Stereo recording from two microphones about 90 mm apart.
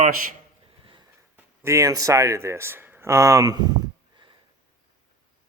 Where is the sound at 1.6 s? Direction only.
35° right (ahead or behind).